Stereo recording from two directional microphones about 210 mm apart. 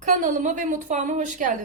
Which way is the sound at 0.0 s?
35° right (ahead or behind).